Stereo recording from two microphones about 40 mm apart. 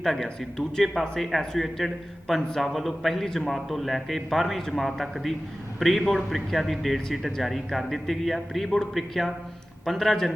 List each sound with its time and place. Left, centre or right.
0.0 s a man's voice: centre
3.2 s a man's voice: centre
3.5 s a man's voice: centre